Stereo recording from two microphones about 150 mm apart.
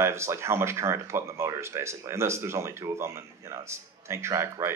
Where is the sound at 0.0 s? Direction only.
20° right (ahead or behind).